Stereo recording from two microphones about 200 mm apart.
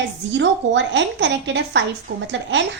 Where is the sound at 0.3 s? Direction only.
65° right (ahead or behind).